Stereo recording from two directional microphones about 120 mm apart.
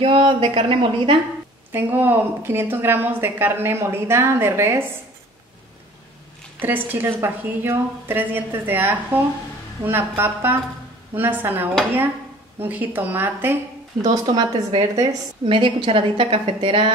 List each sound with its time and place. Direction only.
0.0 s a woman's voice: 50° right (ahead or behind)
1.7 s a woman's voice: 15° right (ahead or behind)
6.6 s a woman's voice: 15° right (ahead or behind)
14.0 s a woman's voice: 35° right (ahead or behind)
15.4 s a woman's voice: 45° right (ahead or behind)